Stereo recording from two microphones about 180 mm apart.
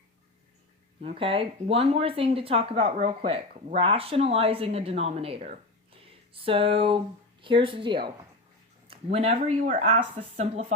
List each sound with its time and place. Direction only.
1.0 s a woman's voice: 30° right (ahead or behind)